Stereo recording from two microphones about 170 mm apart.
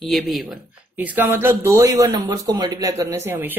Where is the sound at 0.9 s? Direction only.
10° right (ahead or behind).